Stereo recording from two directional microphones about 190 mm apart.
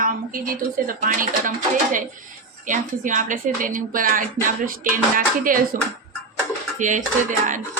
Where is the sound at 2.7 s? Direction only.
40° right (ahead or behind).